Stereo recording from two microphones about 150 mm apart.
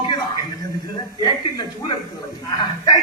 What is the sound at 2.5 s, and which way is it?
Speech, 30° left (ahead or behind).